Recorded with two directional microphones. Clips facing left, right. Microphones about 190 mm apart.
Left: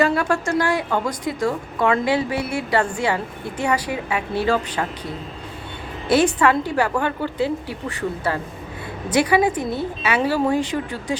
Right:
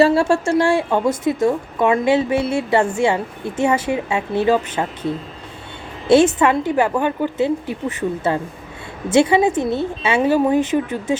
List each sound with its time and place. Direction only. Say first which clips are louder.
0.0 s a woman's voice: right 5 dB; 30° right (ahead or behind)
6.1 s a woman's voice: right 4 dB; 25° right (ahead or behind)